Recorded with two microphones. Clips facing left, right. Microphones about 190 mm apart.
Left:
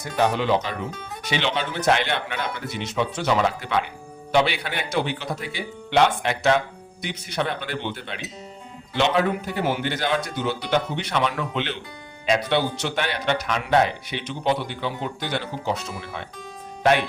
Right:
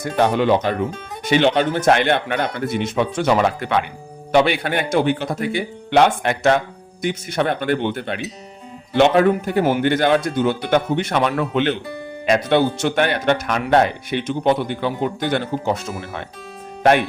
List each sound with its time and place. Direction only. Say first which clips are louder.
0.0 s speech: right 5 dB; 55° right (ahead or behind)